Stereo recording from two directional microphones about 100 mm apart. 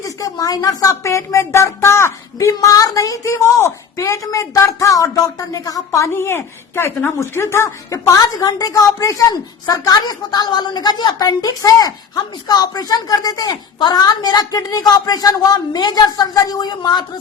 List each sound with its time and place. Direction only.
0.0 s speech: 35° left (ahead or behind)